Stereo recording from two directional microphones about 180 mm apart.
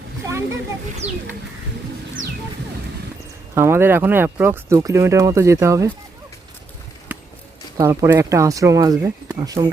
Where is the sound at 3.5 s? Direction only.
15° right (ahead or behind).